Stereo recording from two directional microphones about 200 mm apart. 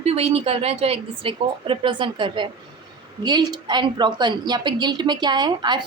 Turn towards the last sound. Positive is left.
turn(degrees=-20)  # may be behind; listen again after turning